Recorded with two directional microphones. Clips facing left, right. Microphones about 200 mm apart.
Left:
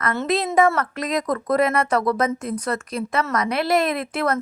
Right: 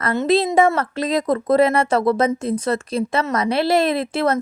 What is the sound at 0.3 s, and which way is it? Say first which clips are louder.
Speech: right 3 dB; 30° right (ahead or behind).